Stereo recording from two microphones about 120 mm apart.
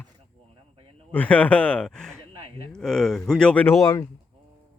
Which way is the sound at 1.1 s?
10° left (ahead or behind).